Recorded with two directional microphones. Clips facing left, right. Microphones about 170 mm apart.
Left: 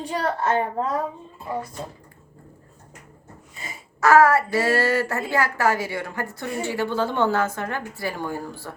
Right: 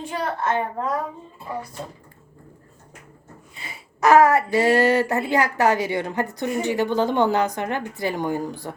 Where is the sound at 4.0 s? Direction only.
20° right (ahead or behind).